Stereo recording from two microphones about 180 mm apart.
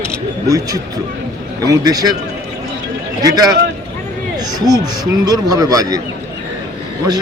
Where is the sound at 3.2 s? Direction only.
20° right (ahead or behind).